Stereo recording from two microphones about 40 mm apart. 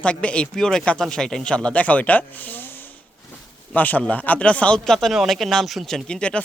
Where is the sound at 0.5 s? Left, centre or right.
Centre.